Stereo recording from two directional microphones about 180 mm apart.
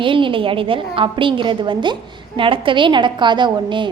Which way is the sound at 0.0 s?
30° right (ahead or behind).